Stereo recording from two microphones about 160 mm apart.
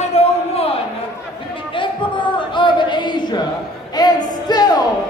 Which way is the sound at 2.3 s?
30° left (ahead or behind).